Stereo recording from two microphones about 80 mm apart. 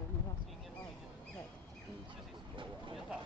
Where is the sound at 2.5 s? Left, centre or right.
Right.